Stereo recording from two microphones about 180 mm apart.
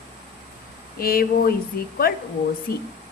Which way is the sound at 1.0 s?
55° left (ahead or behind).